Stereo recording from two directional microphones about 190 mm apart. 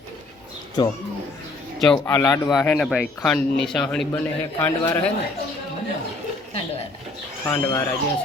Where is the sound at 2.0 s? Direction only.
15° left (ahead or behind).